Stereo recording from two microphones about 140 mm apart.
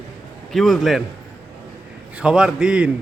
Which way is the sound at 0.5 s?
Centre (ahead or behind).